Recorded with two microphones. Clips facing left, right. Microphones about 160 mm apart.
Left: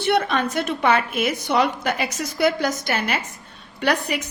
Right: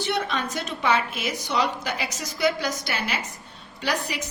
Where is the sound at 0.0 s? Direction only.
60° left (ahead or behind).